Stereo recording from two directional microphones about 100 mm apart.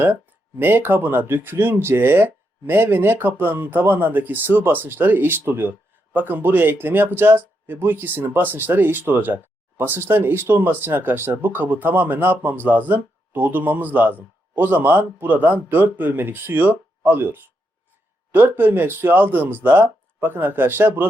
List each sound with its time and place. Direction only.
0.6 s speech: 20° right (ahead or behind)